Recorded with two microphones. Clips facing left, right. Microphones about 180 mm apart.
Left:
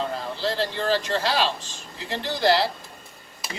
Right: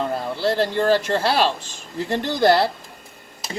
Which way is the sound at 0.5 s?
50° right (ahead or behind).